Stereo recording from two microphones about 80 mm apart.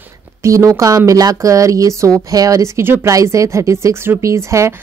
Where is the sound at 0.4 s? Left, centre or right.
Right.